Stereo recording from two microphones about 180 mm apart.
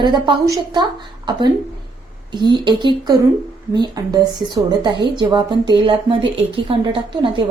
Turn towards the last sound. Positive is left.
turn(degrees=-30)  # may be behind; listen again after turning